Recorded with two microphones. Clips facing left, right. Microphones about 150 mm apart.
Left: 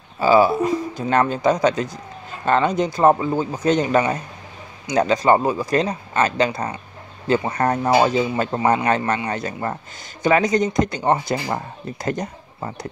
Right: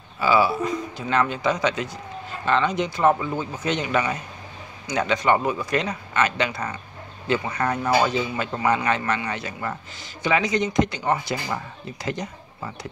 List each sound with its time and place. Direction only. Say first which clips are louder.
0.2 s speech: left 5 dB; 45° left (ahead or behind)